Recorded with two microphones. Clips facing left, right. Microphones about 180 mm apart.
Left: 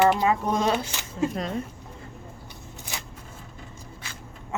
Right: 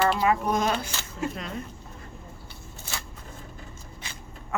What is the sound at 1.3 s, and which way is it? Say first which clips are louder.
Speech: left 6 dB; 35° left (ahead or behind).